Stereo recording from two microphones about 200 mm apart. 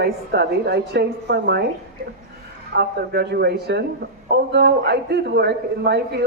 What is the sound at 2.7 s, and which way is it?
A woman's voice, 55° right (ahead or behind).